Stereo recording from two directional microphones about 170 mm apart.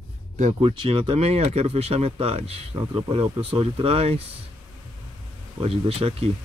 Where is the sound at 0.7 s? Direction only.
30° right (ahead or behind).